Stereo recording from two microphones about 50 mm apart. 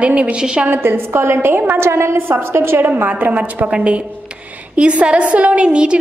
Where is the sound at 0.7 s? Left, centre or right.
Right.